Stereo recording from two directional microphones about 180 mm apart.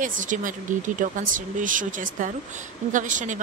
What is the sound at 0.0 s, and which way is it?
Speech, 45° right (ahead or behind).